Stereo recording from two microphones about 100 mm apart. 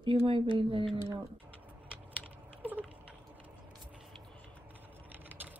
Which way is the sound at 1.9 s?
15° right (ahead or behind).